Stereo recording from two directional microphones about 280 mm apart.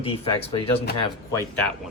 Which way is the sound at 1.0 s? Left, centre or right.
Centre.